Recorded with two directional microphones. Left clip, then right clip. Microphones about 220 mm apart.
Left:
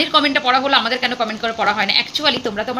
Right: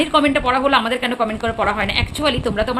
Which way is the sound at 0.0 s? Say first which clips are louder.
Even; 10° right (ahead or behind).